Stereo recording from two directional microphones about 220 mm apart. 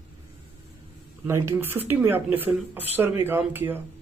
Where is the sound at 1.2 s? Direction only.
10° right (ahead or behind).